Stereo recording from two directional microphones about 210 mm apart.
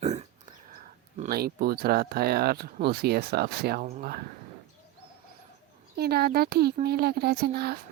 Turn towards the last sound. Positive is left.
turn(degrees=-50)  # may be behind; listen again after turning